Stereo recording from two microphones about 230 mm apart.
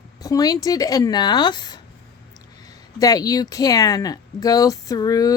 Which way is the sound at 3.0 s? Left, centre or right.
Centre.